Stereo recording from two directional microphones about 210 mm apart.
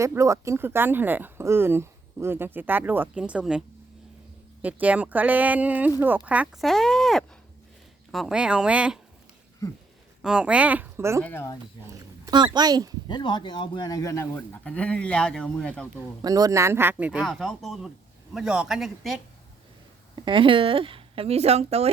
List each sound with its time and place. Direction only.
0.0 s speech: 15° right (ahead or behind)
4.6 s speech: 5° right (ahead or behind)
10.2 s speech: 5° right (ahead or behind)
11.2 s speech: 10° left (ahead or behind)
12.2 s speech: 20° right (ahead or behind)
13.1 s speech: 20° left (ahead or behind); by 15.9 s 5° left (ahead or behind)
16.2 s speech: 15° right (ahead or behind); by 19.2 s centre (ahead or behind)
20.1 s speech: 25° right (ahead or behind)